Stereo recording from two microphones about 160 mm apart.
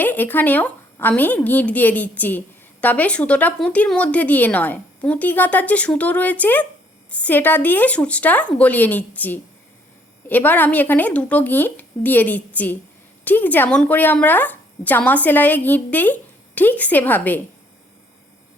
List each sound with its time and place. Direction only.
0.0 s speech: 10° left (ahead or behind)